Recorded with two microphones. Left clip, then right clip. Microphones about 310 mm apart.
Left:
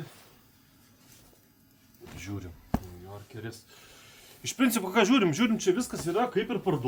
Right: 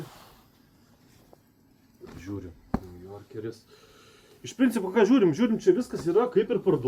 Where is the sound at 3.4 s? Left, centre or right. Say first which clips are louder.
Right 8 dB; left.